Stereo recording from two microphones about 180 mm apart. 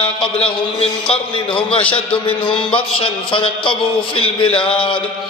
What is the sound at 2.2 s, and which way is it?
Music, 30° left (ahead or behind).